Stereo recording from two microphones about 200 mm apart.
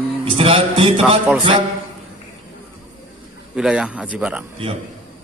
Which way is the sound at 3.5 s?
5° right (ahead or behind).